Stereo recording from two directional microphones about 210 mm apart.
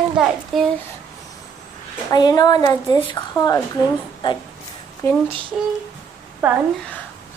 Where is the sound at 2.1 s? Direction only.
20° left (ahead or behind).